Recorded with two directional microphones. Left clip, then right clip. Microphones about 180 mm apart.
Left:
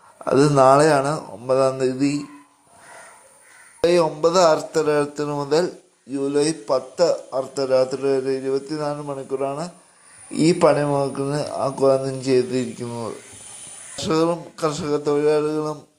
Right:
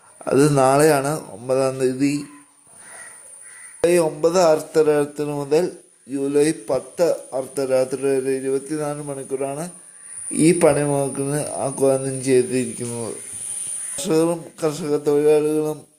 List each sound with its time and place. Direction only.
0.3 s speech: 10° right (ahead or behind)
3.8 s speech: 10° right (ahead or behind)